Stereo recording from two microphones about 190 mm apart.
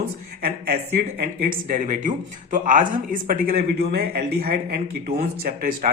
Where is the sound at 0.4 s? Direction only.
50° right (ahead or behind).